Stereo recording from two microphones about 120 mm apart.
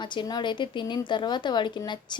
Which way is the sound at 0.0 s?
40° left (ahead or behind).